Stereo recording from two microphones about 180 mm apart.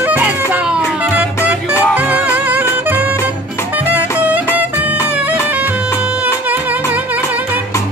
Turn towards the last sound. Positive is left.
turn(degrees=-10)  # may be behind; listen again after turning